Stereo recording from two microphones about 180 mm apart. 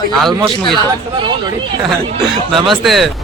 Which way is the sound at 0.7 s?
25° right (ahead or behind).